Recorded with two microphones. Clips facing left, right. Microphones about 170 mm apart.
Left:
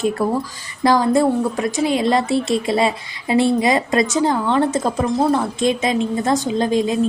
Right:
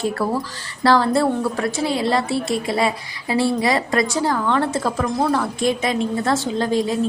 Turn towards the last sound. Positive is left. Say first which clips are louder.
# left 2 dB
turn(degrees=20)  # may be behind; listen again after turning